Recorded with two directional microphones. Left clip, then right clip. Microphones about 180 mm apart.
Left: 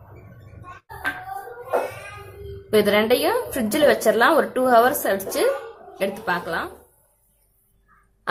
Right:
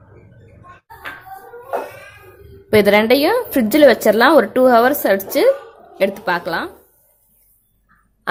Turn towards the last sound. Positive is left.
turn(degrees=-35)  # may be behind; listen again after turning